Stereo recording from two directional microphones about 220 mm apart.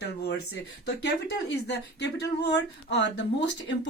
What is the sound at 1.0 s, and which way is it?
Speech, 50° left (ahead or behind).